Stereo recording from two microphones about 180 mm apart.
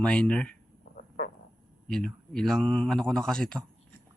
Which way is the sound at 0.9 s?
55° left (ahead or behind).